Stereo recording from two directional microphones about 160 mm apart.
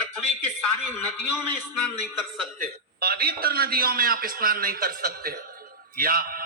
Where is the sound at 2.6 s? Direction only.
70° right (ahead or behind).